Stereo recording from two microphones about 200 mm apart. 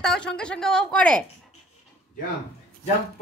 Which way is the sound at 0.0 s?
5° left (ahead or behind).